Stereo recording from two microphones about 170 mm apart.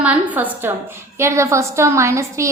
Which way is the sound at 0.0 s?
10° right (ahead or behind).